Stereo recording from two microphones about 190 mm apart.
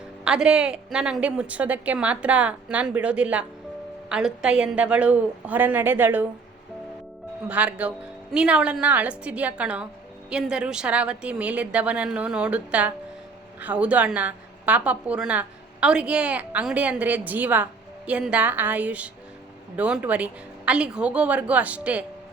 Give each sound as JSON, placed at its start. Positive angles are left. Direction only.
{"t": 0.3, "sound": "a woman's voice", "side_deg": -5}
{"t": 7.4, "sound": "a woman's voice", "side_deg": -10}